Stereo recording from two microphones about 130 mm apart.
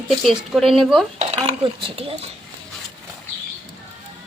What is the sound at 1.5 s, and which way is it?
Speech, 45° right (ahead or behind).